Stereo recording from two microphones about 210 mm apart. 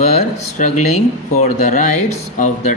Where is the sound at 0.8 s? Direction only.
35° left (ahead or behind).